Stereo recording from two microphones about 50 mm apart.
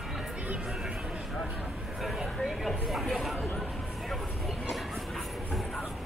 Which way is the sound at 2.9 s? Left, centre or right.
Centre.